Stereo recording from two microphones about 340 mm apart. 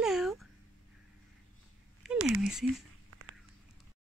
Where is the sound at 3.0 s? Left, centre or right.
Right.